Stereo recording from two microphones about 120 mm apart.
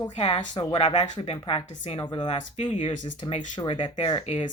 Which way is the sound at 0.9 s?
75° left (ahead or behind).